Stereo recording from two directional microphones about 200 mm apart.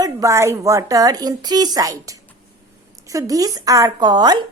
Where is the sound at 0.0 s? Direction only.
15° right (ahead or behind).